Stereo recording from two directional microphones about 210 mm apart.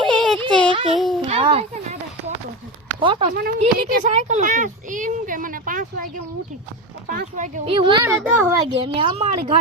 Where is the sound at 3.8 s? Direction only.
40° right (ahead or behind).